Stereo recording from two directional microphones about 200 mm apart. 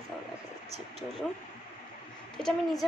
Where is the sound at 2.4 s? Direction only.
5° left (ahead or behind).